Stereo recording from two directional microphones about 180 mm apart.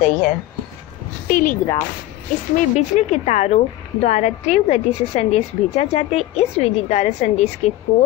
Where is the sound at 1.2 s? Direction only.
50° left (ahead or behind).